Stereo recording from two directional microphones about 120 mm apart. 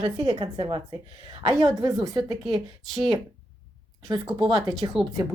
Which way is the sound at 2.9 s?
Centre (ahead or behind).